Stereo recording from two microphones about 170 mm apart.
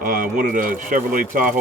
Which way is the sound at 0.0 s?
55° right (ahead or behind).